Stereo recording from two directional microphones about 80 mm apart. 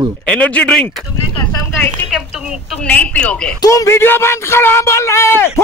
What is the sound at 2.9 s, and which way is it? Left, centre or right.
Speech, centre.